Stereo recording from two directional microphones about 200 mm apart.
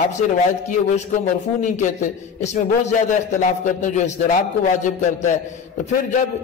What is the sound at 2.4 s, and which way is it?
A man's voice, 35° left (ahead or behind).